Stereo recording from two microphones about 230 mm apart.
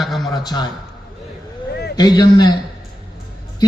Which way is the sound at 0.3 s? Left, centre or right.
Centre.